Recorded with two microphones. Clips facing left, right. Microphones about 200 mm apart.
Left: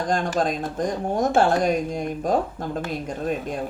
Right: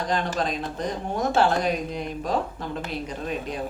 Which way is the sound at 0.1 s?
45° left (ahead or behind).